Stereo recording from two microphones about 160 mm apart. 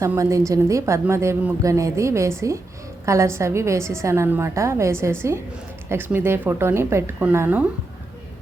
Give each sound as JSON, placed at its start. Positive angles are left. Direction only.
{"t": 0.0, "sound": "a woman's voice", "side_deg": -20}